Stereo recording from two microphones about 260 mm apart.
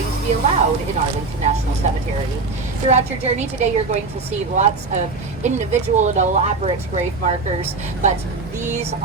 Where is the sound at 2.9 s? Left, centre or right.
Right.